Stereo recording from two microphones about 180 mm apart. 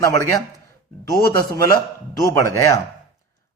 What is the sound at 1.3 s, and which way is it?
A man's voice, 20° left (ahead or behind).